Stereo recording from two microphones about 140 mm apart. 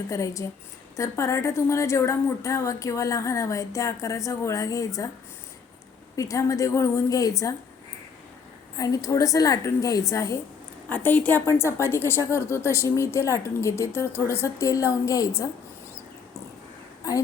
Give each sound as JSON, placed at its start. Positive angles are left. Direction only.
{"t": 0.1, "sound": "a woman's voice", "side_deg": 20}
{"t": 6.1, "sound": "a woman's voice", "side_deg": 25}
{"t": 8.7, "sound": "a woman's voice", "side_deg": 25}
{"t": 10.8, "sound": "a woman's voice", "side_deg": 10}